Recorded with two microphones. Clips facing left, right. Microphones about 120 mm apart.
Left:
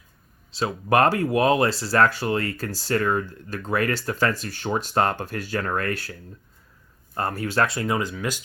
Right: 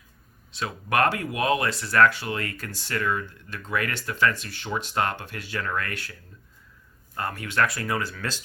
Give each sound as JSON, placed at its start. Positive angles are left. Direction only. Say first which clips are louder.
{"t": 0.5, "sound": "speech", "louder": "left 5 dB", "side_deg": 30}